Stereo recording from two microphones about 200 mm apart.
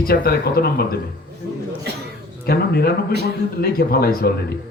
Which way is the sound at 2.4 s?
50° left (ahead or behind).